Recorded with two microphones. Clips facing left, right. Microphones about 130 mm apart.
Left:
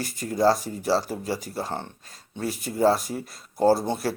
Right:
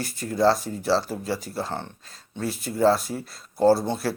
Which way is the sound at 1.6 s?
15° left (ahead or behind).